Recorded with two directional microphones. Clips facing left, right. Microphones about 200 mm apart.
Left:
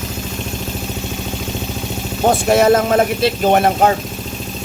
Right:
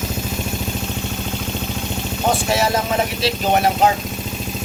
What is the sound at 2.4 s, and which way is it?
Speech, 50° left (ahead or behind).